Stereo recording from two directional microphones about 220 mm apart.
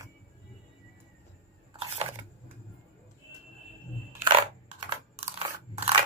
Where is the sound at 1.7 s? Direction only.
25° right (ahead or behind).